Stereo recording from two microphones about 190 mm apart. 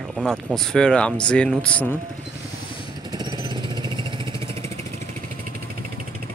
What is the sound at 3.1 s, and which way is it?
Vehicle, 20° right (ahead or behind).